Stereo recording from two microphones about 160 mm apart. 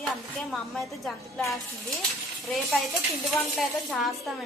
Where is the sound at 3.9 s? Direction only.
Centre (ahead or behind).